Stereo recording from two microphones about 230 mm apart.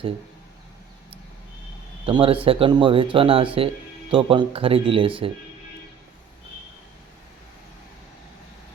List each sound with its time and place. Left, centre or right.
2.0 s speech: right